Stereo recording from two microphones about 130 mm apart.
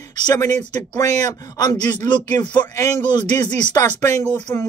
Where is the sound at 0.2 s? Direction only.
30° left (ahead or behind).